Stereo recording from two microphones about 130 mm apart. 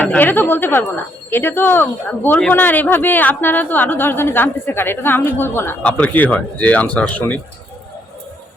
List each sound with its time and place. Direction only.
0.0 s speech: 15° left (ahead or behind)